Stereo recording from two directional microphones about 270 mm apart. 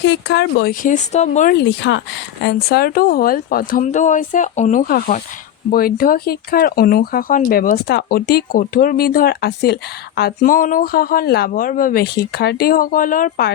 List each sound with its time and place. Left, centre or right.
0.0 s speech: left